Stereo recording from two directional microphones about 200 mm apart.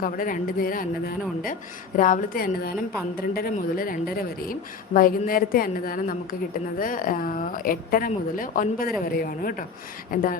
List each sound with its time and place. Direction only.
0.0 s speech: 45° left (ahead or behind)